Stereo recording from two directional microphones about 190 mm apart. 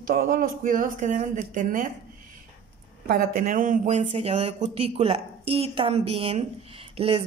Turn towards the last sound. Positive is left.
turn(degrees=-30)  # may be behind; listen again after turning